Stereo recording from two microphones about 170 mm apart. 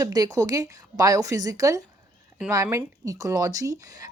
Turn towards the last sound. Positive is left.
turn(degrees=-20)  # may be behind; listen again after turning